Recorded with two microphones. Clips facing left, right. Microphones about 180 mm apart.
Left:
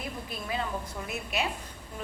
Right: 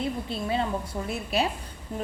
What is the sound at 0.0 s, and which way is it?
A woman's voice, 30° right (ahead or behind).